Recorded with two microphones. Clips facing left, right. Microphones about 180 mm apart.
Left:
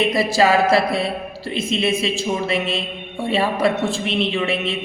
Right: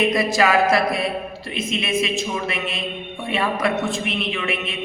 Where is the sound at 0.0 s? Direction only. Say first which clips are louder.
Left 2 dB; 30° left (ahead or behind).